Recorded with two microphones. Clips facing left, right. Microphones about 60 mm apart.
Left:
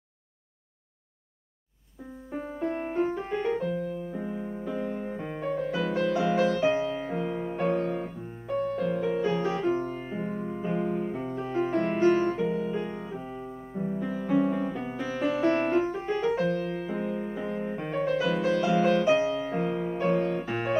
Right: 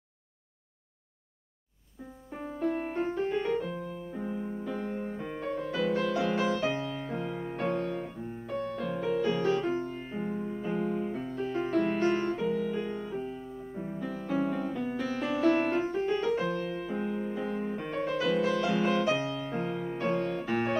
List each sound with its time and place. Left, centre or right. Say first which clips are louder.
2.3 s music: even; centre
8.3 s piano: left 6 dB; centre
8.8 s music: right 1 dB; centre
9.7 s music: left 4 dB; left; by 12.3 s centre
12.5 s music: left 1 dB; centre
13.3 s music: left 2 dB; centre
19.7 s music: left 4 dB; left
20.0 s music: left 4 dB; centre